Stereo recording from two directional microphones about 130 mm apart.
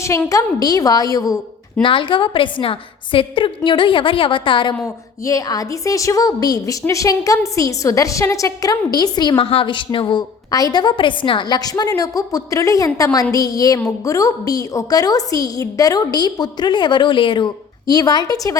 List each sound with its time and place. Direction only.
0.3 s a woman's voice: 25° left (ahead or behind)
1.8 s a woman's voice: 40° left (ahead or behind)
5.2 s a woman's voice: 25° left (ahead or behind)
9.4 s a woman's voice: 45° left (ahead or behind)